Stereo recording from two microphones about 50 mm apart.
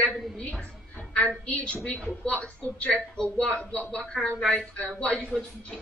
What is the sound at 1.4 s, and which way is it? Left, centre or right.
Speech, left.